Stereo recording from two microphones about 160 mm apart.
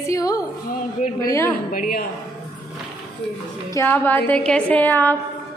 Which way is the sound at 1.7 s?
65° left (ahead or behind).